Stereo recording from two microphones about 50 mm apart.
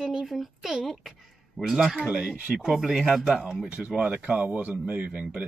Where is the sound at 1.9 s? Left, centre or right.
Centre.